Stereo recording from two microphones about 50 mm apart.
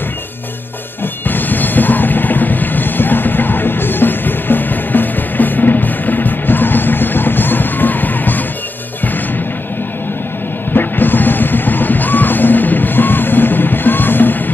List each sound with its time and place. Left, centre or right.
1.2 s music: left
10.7 s music: left